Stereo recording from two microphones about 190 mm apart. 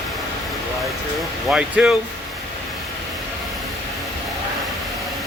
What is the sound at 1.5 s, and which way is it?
Speech, 5° right (ahead or behind).